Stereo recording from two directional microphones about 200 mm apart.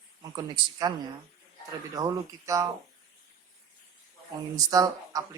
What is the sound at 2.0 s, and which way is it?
Speech, 15° right (ahead or behind).